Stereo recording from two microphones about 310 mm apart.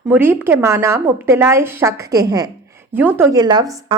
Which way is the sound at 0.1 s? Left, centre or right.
Centre.